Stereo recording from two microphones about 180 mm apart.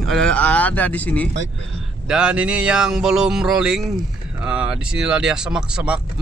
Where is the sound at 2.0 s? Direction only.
5° right (ahead or behind).